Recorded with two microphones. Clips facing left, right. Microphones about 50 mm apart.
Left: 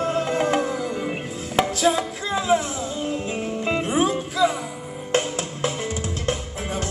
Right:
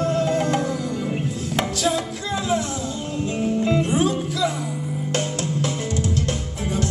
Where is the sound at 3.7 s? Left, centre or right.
Left.